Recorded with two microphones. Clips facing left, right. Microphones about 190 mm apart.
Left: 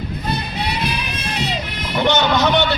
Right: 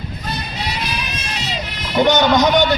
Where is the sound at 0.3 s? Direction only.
55° left (ahead or behind).